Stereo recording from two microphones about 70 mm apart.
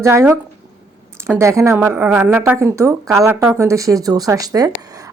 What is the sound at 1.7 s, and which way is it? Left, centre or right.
Speech, right.